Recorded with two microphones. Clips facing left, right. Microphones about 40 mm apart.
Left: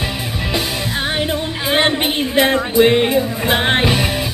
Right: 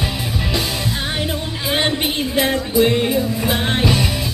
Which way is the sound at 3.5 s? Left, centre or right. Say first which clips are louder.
Left 6 dB; left.